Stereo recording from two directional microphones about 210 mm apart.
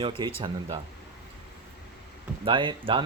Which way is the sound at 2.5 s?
25° right (ahead or behind).